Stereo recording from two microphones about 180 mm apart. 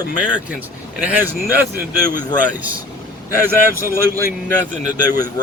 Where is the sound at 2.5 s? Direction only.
10° right (ahead or behind).